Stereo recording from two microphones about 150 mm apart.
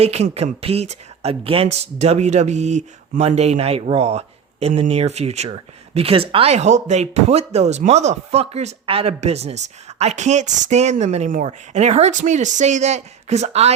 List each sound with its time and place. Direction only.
0.0 s speech: 45° right (ahead or behind)